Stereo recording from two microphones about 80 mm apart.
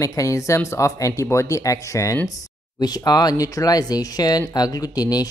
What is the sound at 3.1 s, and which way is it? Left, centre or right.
Speech, left.